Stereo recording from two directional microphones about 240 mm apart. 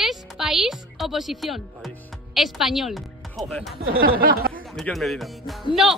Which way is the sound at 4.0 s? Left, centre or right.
Right.